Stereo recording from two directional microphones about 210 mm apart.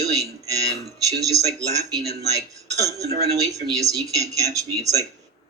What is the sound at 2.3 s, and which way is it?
Speech, 15° right (ahead or behind).